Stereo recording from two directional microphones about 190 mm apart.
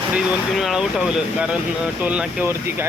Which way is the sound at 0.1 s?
5° right (ahead or behind).